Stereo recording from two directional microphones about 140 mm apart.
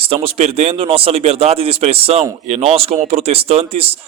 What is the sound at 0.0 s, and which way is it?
Speech, 40° right (ahead or behind).